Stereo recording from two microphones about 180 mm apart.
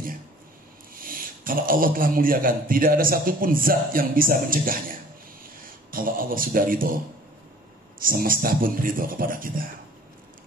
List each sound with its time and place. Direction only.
1.0 s a man's voice: 50° right (ahead or behind)
5.9 s a man's voice: 50° right (ahead or behind)
8.0 s a man's voice: 50° right (ahead or behind)